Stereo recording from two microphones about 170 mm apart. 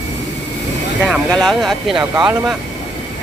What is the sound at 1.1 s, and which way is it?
Speech, centre (ahead or behind).